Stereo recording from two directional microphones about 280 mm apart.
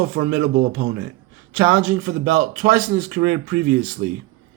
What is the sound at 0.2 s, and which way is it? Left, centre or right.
Speech, right.